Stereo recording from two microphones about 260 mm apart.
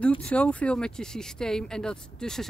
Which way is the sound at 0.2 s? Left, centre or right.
Centre.